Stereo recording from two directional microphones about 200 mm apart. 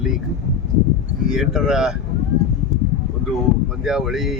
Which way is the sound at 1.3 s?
5° right (ahead or behind).